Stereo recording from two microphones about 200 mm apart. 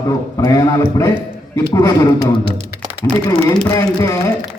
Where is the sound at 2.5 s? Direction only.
30° right (ahead or behind).